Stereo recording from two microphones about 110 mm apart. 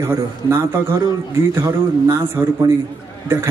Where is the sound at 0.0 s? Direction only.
20° right (ahead or behind).